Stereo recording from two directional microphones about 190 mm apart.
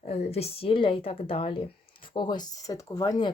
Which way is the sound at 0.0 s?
35° left (ahead or behind).